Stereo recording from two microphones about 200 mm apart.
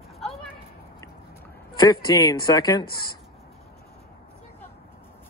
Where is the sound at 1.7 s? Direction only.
20° left (ahead or behind).